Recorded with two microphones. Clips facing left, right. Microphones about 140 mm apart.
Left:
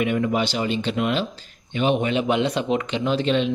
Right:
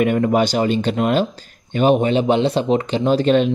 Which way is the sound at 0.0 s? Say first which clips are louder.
Right 6 dB; 45° right (ahead or behind).